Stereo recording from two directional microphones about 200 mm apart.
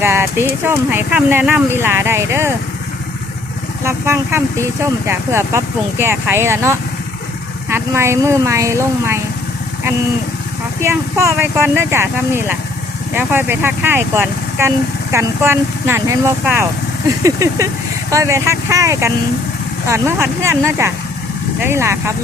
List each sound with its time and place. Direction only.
0.0 s speech: 10° right (ahead or behind)
3.8 s speech: 10° right (ahead or behind)
10.8 s speech: 10° right (ahead or behind)